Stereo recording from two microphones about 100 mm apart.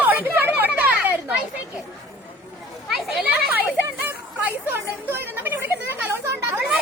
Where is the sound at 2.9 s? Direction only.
5° right (ahead or behind).